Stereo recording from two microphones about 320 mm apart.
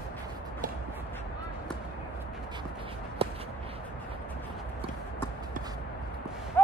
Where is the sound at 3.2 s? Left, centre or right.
Centre.